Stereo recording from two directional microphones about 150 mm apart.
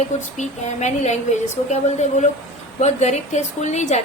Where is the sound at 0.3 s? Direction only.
50° left (ahead or behind).